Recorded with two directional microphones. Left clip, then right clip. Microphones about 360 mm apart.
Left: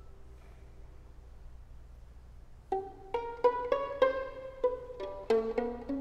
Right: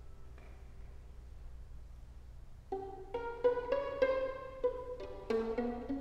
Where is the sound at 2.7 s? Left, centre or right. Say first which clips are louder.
Left 6 dB; left.